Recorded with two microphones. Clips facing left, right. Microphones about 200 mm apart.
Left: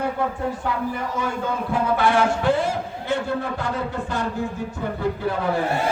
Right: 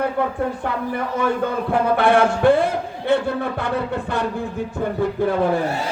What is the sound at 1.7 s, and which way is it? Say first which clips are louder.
Speech: right 3 dB; 60° right (ahead or behind).